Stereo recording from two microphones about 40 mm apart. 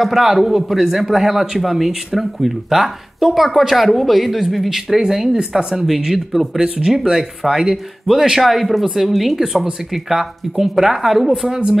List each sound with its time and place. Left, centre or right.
0.0 s a man's voice: centre